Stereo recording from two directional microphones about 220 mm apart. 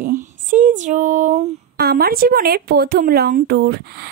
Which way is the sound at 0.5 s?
35° right (ahead or behind).